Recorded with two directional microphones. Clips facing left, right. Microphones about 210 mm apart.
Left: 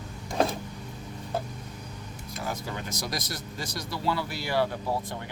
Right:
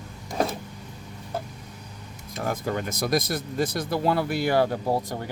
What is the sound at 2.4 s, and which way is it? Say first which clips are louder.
Speech: right 7 dB; 55° right (ahead or behind).